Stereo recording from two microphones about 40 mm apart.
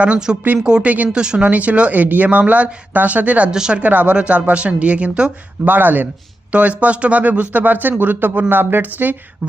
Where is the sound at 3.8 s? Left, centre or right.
Right.